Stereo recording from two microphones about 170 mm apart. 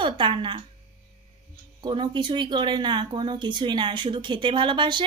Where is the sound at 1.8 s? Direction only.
25° right (ahead or behind).